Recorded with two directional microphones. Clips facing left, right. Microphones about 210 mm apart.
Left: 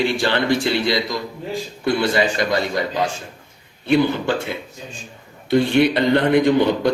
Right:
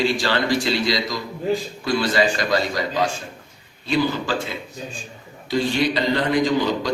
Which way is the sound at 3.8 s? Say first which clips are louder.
Left 4 dB; 60° left (ahead or behind).